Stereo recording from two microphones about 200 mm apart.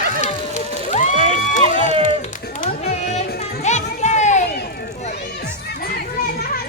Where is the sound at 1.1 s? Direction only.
30° right (ahead or behind).